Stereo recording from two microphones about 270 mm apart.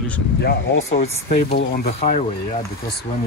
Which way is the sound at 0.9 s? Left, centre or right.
Left.